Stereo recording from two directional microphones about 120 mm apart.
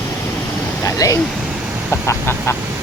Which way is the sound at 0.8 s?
30° left (ahead or behind).